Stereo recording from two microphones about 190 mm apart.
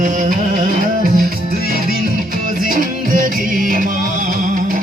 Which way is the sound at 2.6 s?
45° right (ahead or behind).